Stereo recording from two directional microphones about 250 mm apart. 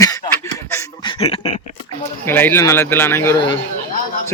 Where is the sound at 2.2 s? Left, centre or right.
Centre.